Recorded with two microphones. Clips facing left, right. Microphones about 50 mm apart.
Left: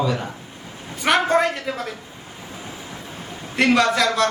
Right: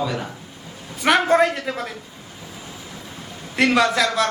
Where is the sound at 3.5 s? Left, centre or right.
Centre.